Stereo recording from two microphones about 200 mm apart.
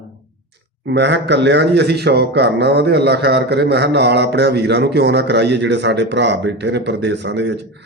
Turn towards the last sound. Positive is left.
turn(degrees=-60)  # may be behind; listen again after turning